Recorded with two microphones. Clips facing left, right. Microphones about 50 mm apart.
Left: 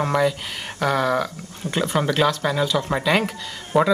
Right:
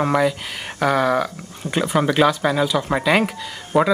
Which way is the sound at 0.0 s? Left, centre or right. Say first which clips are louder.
Right 2 dB; centre.